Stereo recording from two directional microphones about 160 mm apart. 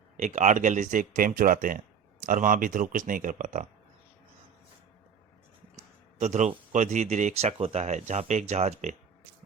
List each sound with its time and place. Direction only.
0.2 s speech: 50° right (ahead or behind)
5.7 s a sound: 45° right (ahead or behind)
6.7 s speech: 50° right (ahead or behind)